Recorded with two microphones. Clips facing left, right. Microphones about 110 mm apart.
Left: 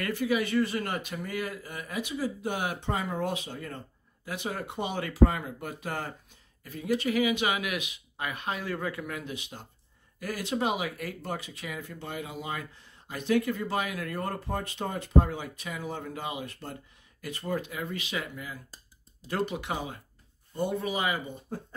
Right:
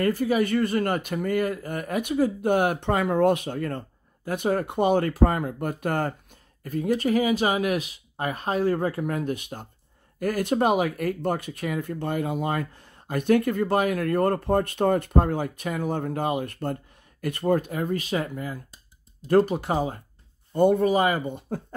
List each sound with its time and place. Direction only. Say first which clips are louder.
0.0 s speech: right 6 dB; 40° right (ahead or behind)
20.5 s speech: right 11 dB; 55° right (ahead or behind)
21.3 s speech: right 7 dB; 70° right (ahead or behind)